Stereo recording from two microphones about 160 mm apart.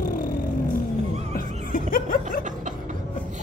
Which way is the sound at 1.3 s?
60° left (ahead or behind).